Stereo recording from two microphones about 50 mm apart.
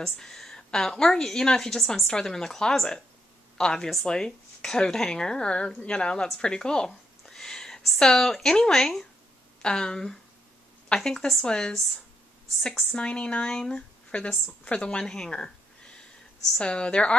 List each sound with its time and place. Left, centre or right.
0.0 s a woman's voice: centre